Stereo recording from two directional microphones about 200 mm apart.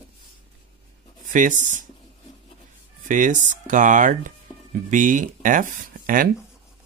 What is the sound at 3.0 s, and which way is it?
Speech, 40° right (ahead or behind).